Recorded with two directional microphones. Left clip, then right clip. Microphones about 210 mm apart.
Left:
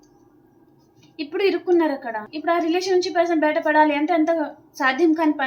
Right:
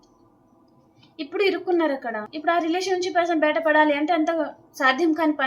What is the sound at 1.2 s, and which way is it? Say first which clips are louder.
A woman's voice: left 1 dB; 20° right (ahead or behind).